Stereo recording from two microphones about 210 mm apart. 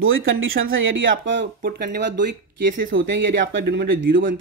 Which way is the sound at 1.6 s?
50° right (ahead or behind).